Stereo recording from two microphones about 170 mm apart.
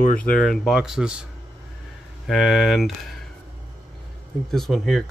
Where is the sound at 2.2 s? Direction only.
Centre (ahead or behind).